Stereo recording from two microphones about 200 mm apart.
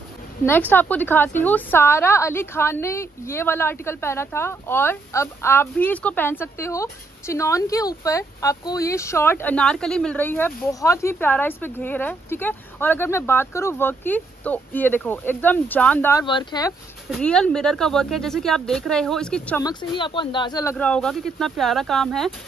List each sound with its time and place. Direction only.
0.5 s a woman's voice: 10° left (ahead or behind)
17.1 s speech: 5° left (ahead or behind)
19.6 s speech: 20° left (ahead or behind)
20.7 s speech: 5° left (ahead or behind)